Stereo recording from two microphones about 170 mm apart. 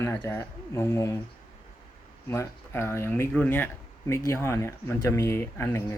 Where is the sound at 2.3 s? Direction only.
15° left (ahead or behind).